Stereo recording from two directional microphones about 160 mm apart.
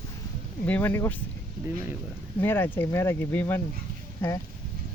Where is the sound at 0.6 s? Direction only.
10° left (ahead or behind).